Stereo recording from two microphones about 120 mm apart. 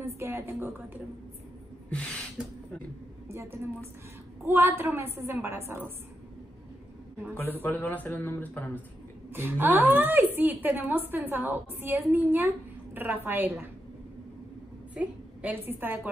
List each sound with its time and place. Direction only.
0.0 s a woman's voice: 20° right (ahead or behind)
1.9 s gasp: 10° left (ahead or behind)
4.5 s a woman's voice: 20° right (ahead or behind)
7.6 s a man's voice: 15° left (ahead or behind)
9.3 s a woman's voice: 15° right (ahead or behind)
15.0 s a woman's voice: 15° right (ahead or behind)